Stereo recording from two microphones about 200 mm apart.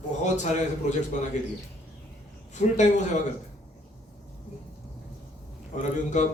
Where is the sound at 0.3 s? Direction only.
35° left (ahead or behind).